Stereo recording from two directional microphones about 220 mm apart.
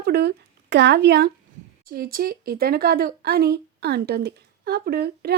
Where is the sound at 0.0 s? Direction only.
45° right (ahead or behind).